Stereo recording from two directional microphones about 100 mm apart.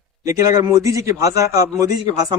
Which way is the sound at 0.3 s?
35° right (ahead or behind).